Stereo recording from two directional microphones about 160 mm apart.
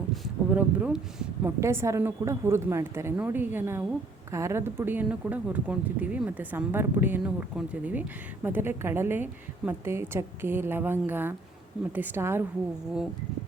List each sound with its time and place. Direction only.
0.5 s speech: 5° right (ahead or behind)
1.6 s speech: 15° right (ahead or behind)